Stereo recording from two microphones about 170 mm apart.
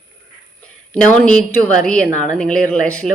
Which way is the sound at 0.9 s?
5° left (ahead or behind).